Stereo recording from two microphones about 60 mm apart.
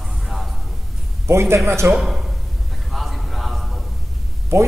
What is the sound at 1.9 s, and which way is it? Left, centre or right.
Speech, centre.